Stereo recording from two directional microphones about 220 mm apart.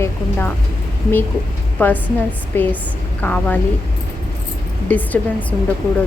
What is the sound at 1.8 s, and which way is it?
A woman's voice, 10° left (ahead or behind).